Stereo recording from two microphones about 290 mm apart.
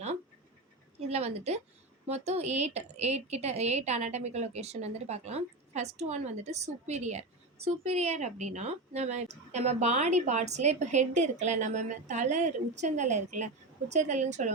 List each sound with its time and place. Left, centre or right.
0.9 s a woman's voice: right